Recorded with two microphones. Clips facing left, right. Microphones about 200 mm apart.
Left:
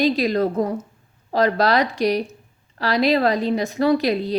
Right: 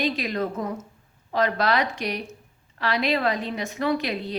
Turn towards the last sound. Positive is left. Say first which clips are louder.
# left 7 dB
turn(degrees=35)  # may be behind; listen again after turning